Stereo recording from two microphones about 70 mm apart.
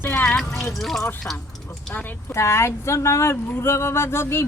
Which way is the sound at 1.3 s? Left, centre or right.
Left.